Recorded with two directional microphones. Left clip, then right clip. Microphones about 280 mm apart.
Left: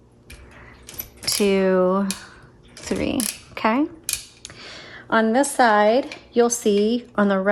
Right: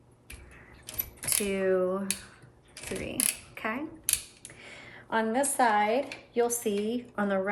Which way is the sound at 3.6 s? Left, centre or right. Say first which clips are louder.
Left 17 dB; centre.